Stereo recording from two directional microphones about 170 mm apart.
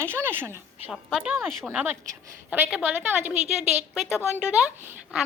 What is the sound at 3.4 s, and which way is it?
Speech, 40° right (ahead or behind).